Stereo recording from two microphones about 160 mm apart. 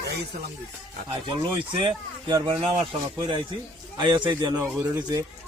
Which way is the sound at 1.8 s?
30° right (ahead or behind).